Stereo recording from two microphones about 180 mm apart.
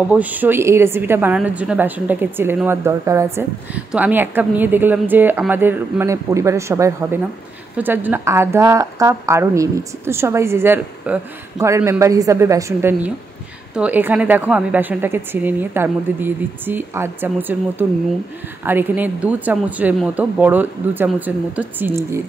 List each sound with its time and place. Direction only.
0.1 s a woman's voice: 10° right (ahead or behind)